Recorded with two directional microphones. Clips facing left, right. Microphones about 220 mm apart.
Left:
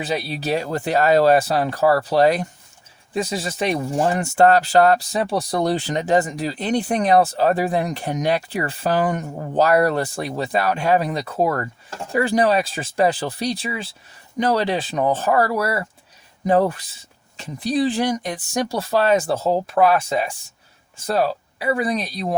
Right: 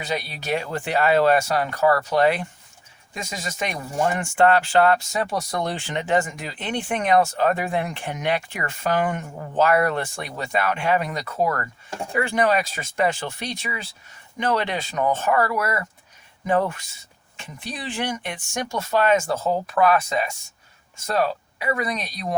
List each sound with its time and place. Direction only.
0.0 s speech: 30° left (ahead or behind)